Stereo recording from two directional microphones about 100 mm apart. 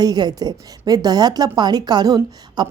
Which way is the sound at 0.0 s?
45° right (ahead or behind).